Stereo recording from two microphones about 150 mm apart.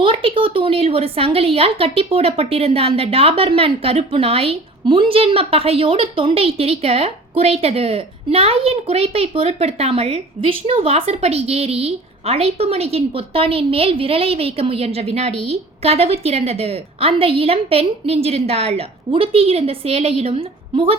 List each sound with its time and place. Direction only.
0.0 s a woman's voice: 35° right (ahead or behind)